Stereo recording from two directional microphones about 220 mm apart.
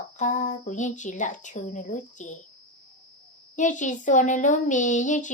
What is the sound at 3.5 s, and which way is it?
Speech, 35° left (ahead or behind).